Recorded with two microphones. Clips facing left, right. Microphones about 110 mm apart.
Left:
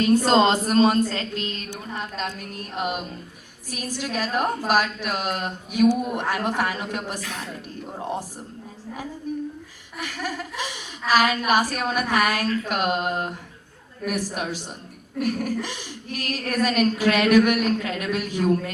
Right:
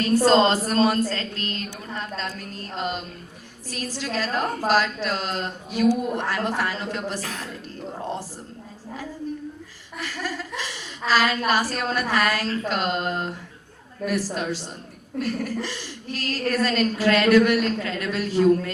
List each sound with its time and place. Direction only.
0.3 s a woman's voice: 15° left (ahead or behind)
9.3 s a sound: 15° left (ahead or behind)
10.0 s a woman's voice: 15° left (ahead or behind)
15.2 s a woman's voice: 15° left (ahead or behind)